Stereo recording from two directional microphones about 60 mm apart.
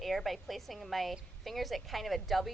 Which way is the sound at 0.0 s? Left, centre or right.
Centre.